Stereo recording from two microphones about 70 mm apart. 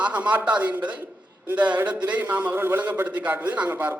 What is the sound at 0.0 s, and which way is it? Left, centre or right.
A man's voice, right.